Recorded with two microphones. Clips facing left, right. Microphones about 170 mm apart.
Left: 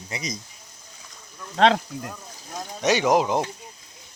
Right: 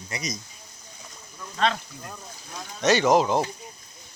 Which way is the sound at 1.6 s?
90° left.